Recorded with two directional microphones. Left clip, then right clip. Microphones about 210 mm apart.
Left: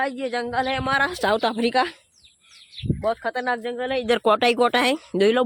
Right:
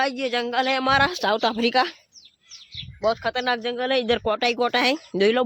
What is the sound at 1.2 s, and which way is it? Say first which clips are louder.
Speech: left 1 dB; 15° left (ahead or behind).